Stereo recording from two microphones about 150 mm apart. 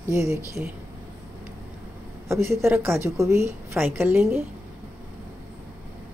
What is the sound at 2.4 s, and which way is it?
A woman's voice, 15° right (ahead or behind).